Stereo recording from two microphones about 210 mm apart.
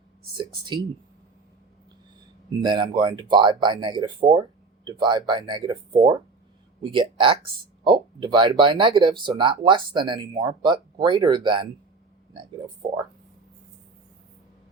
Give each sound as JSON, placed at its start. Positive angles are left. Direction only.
{"t": 0.3, "sound": "speech", "side_deg": -20}
{"t": 2.6, "sound": "speech", "side_deg": -20}